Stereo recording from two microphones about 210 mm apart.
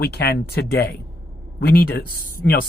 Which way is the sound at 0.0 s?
50° left (ahead or behind).